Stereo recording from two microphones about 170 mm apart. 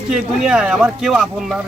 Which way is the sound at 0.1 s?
5° right (ahead or behind).